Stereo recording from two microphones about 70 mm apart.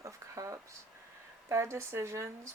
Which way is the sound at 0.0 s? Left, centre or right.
Right.